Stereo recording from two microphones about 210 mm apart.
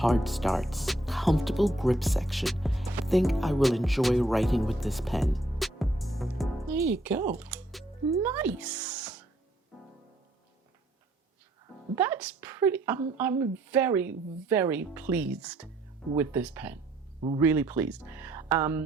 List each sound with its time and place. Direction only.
0.0 s speech: centre (ahead or behind)
11.9 s speech: 10° right (ahead or behind)
17.2 s speech: 25° right (ahead or behind)
17.4 s speech: 10° right (ahead or behind)